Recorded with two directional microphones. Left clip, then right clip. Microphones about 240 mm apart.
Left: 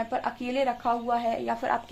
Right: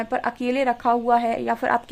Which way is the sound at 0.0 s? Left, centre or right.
Right.